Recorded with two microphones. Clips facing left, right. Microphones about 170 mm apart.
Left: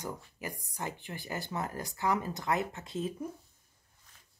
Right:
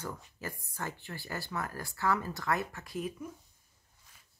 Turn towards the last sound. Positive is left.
turn(degrees=25)  # may be behind; listen again after turning